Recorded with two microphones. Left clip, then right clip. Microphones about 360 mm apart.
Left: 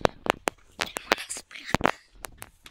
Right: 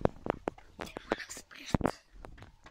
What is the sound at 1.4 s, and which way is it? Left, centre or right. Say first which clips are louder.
Whispering: left 7 dB; centre.